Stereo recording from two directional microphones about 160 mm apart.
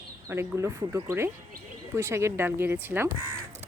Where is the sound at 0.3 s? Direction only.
15° right (ahead or behind).